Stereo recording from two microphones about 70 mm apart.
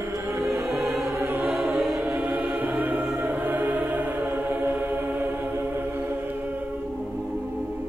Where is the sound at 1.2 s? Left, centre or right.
Right.